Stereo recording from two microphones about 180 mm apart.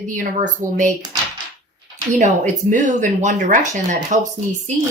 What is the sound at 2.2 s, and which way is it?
Speech, 45° right (ahead or behind).